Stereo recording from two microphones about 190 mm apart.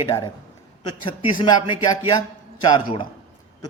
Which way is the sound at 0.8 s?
25° left (ahead or behind).